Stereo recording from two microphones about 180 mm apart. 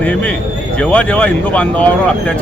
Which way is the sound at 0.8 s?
5° left (ahead or behind).